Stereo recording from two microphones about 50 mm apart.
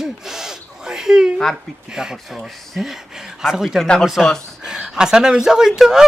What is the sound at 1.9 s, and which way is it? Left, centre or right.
A man's voice, centre.